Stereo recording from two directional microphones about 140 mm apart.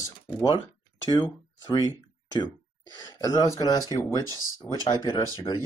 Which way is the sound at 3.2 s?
25° left (ahead or behind).